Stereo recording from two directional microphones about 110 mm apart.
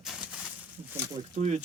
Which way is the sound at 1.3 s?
90° right.